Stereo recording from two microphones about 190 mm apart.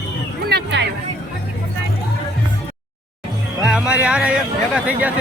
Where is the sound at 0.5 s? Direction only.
65° right (ahead or behind).